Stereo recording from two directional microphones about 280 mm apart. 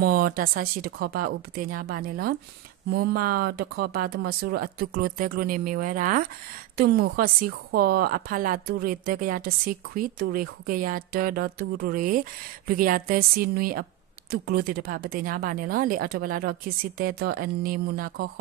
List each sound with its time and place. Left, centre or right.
0.0 s a woman's voice: right